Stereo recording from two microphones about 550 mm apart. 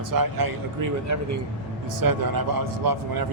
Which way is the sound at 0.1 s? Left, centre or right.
Right.